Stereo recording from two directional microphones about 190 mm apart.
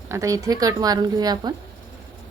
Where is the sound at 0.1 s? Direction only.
15° right (ahead or behind).